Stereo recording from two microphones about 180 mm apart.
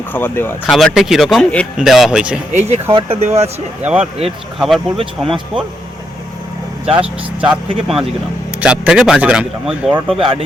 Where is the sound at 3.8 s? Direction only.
10° right (ahead or behind).